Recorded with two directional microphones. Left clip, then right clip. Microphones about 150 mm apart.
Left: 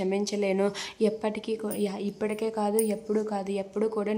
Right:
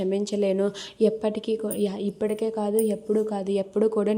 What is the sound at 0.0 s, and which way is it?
A woman's voice, 25° right (ahead or behind).